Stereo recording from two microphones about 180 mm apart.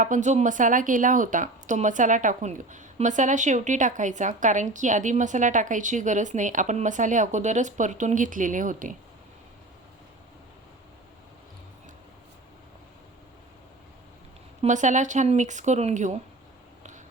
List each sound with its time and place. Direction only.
0.0 s a woman's voice: 45° right (ahead or behind)
14.6 s a woman's voice: 45° right (ahead or behind)